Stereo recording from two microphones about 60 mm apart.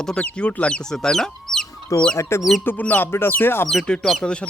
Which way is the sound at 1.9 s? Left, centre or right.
Left.